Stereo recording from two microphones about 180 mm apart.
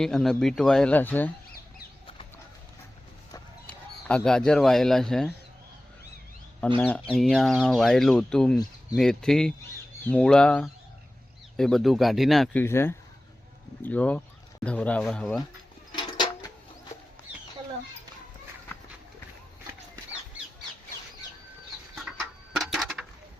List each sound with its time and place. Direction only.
0.0 s speech: centre (ahead or behind)
3.7 s speech: 5° left (ahead or behind)
6.7 s speech: 10° left (ahead or behind)
12.6 s speech: 15° left (ahead or behind)
16.1 s a sound: 25° left (ahead or behind)
21.9 s a sound: centre (ahead or behind)